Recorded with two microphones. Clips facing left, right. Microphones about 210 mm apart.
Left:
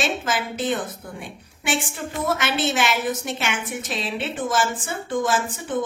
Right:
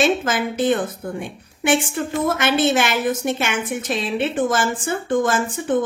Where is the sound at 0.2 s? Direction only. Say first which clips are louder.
Right 5 dB; 50° right (ahead or behind).